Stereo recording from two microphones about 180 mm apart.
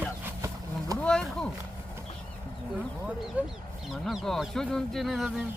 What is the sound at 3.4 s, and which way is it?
Speech, 10° right (ahead or behind).